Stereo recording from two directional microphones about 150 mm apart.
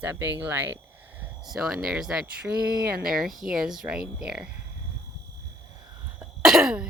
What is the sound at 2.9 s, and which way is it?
Speech, 75° right (ahead or behind).